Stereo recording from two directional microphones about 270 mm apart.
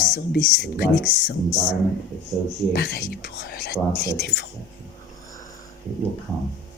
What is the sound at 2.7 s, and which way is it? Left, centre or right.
Speech, left.